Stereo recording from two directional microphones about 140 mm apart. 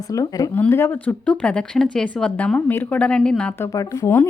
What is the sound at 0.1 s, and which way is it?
Speech, 25° left (ahead or behind).